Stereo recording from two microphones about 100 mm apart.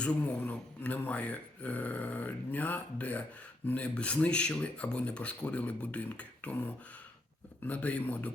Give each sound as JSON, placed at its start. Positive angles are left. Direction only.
{"t": 0.0, "sound": "speech", "side_deg": 15}